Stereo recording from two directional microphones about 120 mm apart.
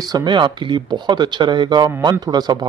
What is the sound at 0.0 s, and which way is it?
A man's voice, 35° right (ahead or behind).